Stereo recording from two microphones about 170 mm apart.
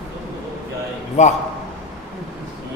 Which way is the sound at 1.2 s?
40° left (ahead or behind).